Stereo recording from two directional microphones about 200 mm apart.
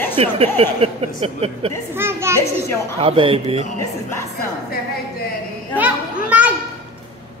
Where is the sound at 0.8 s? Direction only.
30° right (ahead or behind).